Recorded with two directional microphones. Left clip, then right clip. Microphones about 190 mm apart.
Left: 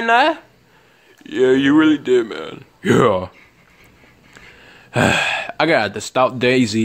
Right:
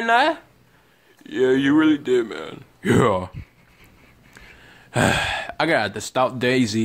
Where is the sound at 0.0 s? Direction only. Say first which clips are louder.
Left 4 dB; 10° left (ahead or behind).